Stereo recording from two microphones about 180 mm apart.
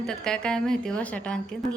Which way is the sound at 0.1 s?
5° left (ahead or behind).